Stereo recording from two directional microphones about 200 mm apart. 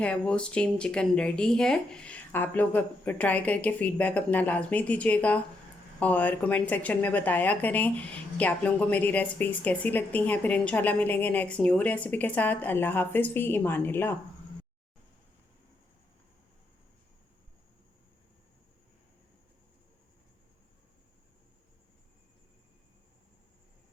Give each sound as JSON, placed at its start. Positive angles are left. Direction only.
{"t": 0.0, "sound": "a woman's voice", "side_deg": 5}